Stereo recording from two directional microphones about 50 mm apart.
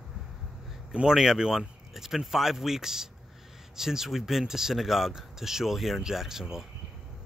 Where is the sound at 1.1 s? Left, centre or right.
Centre.